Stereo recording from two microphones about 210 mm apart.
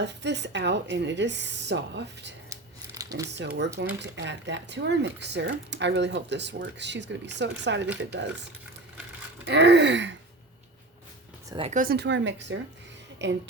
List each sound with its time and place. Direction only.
0.0 s speech: 55° right (ahead or behind)
2.5 s a sound: 15° right (ahead or behind)
3.3 s speech: 55° right (ahead or behind)
9.5 s speech: 55° right (ahead or behind)
11.5 s speech: 25° right (ahead or behind)
11.8 s speech: 50° right (ahead or behind)